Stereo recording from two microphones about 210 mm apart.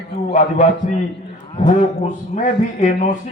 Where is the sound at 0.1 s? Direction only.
30° left (ahead or behind).